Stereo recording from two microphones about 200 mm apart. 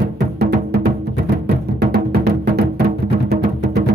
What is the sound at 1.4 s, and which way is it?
Music, 50° right (ahead or behind).